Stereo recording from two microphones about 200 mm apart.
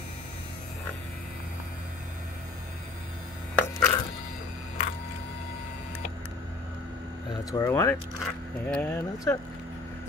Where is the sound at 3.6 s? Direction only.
10° left (ahead or behind).